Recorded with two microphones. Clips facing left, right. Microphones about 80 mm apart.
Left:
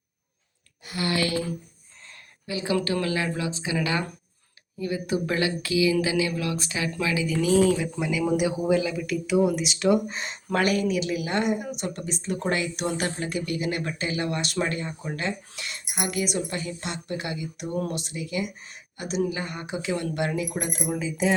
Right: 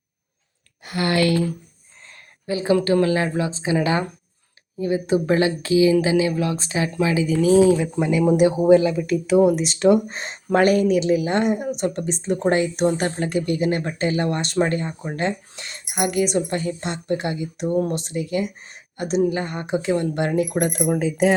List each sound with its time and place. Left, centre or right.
0.9 s speech: right
2.5 s speech: right